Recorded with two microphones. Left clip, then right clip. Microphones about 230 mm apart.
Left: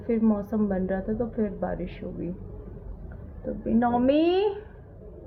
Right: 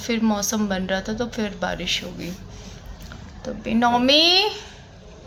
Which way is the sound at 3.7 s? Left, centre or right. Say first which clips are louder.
Right 5 dB; centre.